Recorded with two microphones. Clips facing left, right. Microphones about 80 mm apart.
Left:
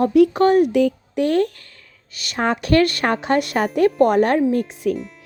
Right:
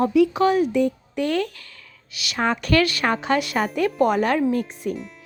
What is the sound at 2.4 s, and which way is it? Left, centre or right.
A woman's voice, left.